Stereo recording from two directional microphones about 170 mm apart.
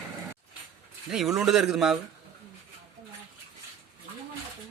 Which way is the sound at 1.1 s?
5° right (ahead or behind).